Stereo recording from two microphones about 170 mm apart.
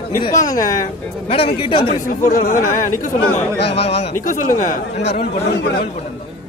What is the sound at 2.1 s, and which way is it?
Speech, 50° left (ahead or behind).